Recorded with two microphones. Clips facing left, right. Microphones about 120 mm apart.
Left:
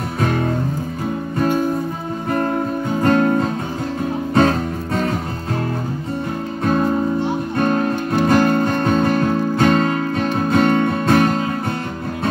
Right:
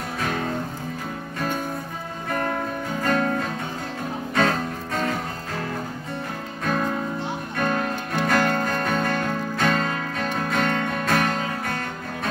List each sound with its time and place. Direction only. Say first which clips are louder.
3.2 s music: left 7 dB; 30° left (ahead or behind)
6.6 s music: left 7 dB; 30° left (ahead or behind)